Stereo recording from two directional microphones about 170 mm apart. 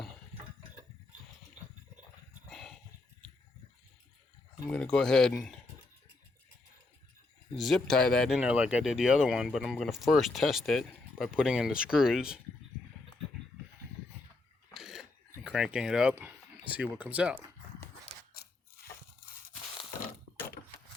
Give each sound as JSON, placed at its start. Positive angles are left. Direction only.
{"t": 2.5, "sound": "a sound", "side_deg": 0}
{"t": 4.7, "sound": "speech", "side_deg": 5}
{"t": 7.5, "sound": "speech", "side_deg": 0}
{"t": 8.4, "sound": "speech", "side_deg": -5}
{"t": 14.7, "sound": "cough", "side_deg": 0}
{"t": 15.4, "sound": "speech", "side_deg": -5}
{"t": 20.6, "sound": "wood", "side_deg": 55}